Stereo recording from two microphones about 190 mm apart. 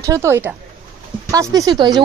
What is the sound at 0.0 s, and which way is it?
Speech, 15° right (ahead or behind).